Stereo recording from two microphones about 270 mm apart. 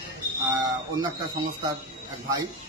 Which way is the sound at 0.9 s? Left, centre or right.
Centre.